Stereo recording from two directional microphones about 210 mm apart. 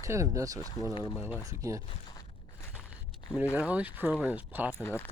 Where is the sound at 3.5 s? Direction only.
5° right (ahead or behind).